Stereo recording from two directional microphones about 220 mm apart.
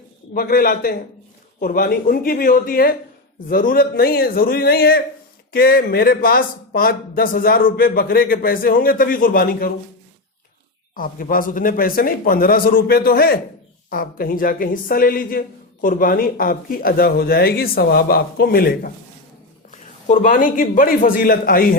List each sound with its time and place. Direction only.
0.3 s speech: 40° left (ahead or behind)
10.9 s speech: 40° left (ahead or behind)
20.1 s speech: 40° left (ahead or behind)